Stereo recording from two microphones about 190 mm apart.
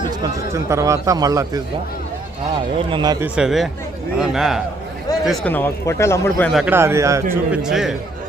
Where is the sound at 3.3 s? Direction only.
Centre (ahead or behind).